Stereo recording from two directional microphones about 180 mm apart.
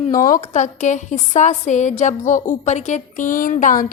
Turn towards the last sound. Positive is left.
turn(degrees=45)  # may be behind; listen again after turning